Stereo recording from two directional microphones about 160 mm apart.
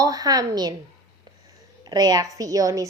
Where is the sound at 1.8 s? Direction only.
25° right (ahead or behind).